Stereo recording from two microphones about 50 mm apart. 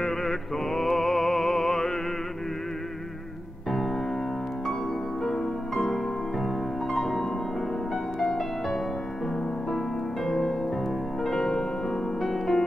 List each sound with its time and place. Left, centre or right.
0.0 s mantra: centre
0.7 s music: centre
5.2 s music: centre
10.2 s music: centre